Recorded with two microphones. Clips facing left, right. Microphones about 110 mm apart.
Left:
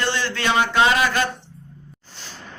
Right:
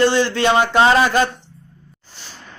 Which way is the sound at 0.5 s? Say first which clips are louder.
Right 3 dB; 35° right (ahead or behind).